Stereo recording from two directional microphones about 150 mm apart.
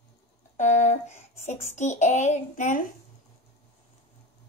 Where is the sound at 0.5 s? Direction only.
50° left (ahead or behind).